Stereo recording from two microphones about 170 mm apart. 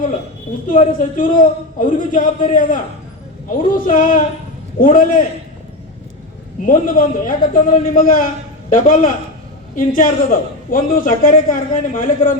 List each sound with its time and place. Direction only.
0.7 s a man's voice: 50° left (ahead or behind)
3.8 s a man's voice: 50° left (ahead or behind)
6.7 s a man's voice: 55° left (ahead or behind)